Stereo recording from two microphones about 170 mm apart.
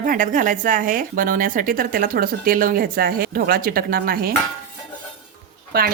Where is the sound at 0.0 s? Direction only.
50° right (ahead or behind).